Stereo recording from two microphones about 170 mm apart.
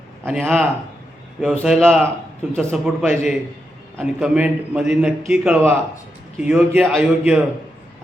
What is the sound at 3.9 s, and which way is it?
A man's voice, 5° right (ahead or behind).